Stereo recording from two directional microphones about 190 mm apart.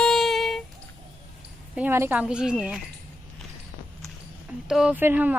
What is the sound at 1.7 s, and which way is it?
Speech, 10° right (ahead or behind).